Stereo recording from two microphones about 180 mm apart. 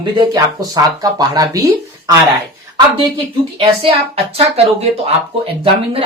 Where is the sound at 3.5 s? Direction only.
30° right (ahead or behind).